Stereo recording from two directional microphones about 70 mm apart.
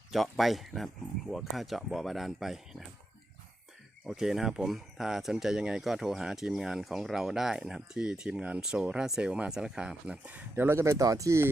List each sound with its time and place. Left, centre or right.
0.1 s speech: centre
4.0 s speech: centre
10.5 s speech: right
11.0 s speech: right